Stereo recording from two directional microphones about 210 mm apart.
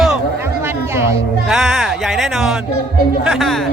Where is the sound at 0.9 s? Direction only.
10° right (ahead or behind).